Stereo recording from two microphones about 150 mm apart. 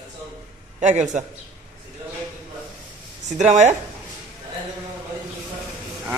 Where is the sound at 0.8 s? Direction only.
55° right (ahead or behind).